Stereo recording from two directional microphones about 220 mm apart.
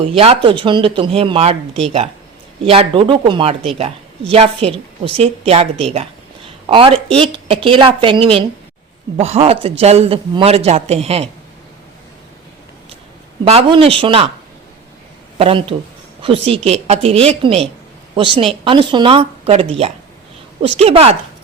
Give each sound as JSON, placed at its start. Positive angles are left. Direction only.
{"t": 0.1, "sound": "speech", "side_deg": -25}
{"t": 13.4, "sound": "speech", "side_deg": -25}
{"t": 15.4, "sound": "speech", "side_deg": -25}